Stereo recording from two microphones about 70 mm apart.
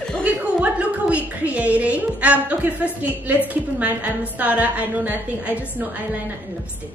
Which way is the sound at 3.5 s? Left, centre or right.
Right.